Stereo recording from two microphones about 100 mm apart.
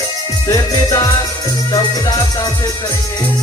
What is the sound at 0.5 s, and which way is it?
Music, 40° left (ahead or behind).